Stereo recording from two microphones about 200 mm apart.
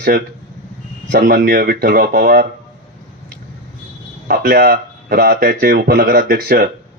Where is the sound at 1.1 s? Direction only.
55° right (ahead or behind).